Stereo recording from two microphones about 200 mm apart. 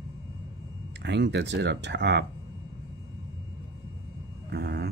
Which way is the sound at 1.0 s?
60° right (ahead or behind).